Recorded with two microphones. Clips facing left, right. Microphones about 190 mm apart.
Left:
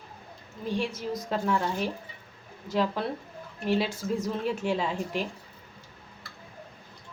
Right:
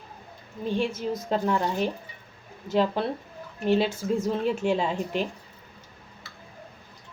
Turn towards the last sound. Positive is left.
turn(degrees=-20)  # may be behind; listen again after turning